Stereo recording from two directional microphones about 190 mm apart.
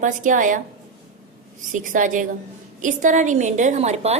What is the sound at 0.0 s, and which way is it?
Speech, 40° right (ahead or behind).